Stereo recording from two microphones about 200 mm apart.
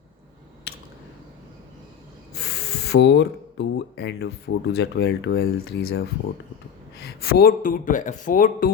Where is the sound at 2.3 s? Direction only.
55° left (ahead or behind).